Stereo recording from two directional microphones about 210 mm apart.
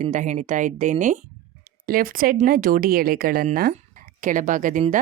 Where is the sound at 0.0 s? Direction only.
35° right (ahead or behind).